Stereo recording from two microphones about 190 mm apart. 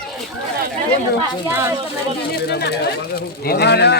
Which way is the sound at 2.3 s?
60° left (ahead or behind).